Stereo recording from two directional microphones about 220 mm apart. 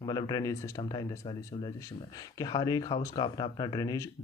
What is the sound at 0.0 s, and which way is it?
Speech, 20° left (ahead or behind).